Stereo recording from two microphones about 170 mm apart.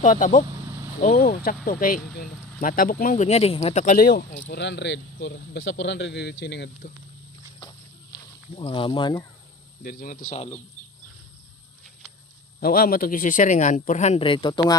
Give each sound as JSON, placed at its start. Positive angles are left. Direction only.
{"t": 0.2, "sound": "speech", "side_deg": 45}
{"t": 4.5, "sound": "speech", "side_deg": 90}
{"t": 8.1, "sound": "speech", "side_deg": 25}
{"t": 9.8, "sound": "speech", "side_deg": 55}
{"t": 10.3, "sound": "speech", "side_deg": 40}
{"t": 12.5, "sound": "speech", "side_deg": 60}